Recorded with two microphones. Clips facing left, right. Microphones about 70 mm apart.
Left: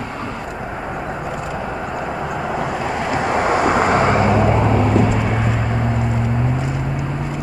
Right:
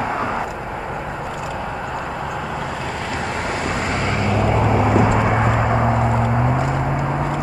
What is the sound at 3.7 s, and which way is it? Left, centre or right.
Vehicle, left.